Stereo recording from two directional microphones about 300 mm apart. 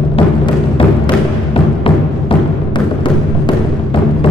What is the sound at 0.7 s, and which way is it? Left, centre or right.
Music, centre.